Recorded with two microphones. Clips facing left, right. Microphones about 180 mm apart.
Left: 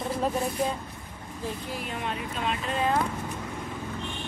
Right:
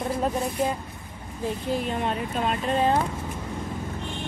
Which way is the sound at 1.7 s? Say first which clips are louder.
Right 7 dB; 35° right (ahead or behind).